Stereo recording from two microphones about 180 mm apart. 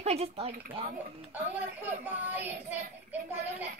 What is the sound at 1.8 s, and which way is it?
Child singing, 10° right (ahead or behind).